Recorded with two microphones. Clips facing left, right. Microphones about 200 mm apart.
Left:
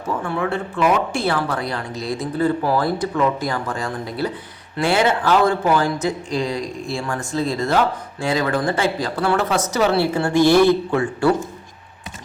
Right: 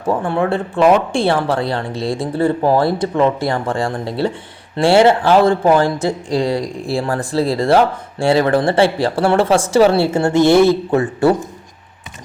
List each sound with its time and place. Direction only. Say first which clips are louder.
0.1 s speech: right 6 dB; 30° right (ahead or behind)